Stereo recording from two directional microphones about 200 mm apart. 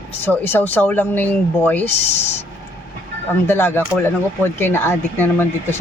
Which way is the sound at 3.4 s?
10° left (ahead or behind).